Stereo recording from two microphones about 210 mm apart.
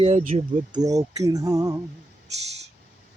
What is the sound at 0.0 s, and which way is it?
Speech, 35° right (ahead or behind).